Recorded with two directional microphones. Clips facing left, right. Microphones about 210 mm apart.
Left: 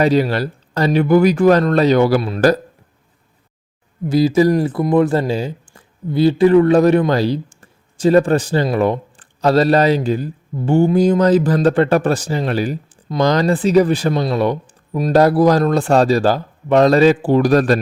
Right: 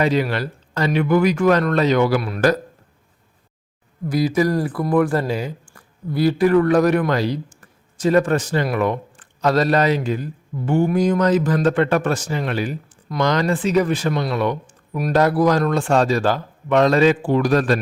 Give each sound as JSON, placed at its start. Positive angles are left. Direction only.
{"t": 0.0, "sound": "speech", "side_deg": 35}
{"t": 4.0, "sound": "speech", "side_deg": 25}